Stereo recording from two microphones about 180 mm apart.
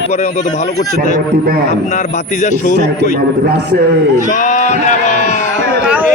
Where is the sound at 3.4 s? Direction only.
65° right (ahead or behind).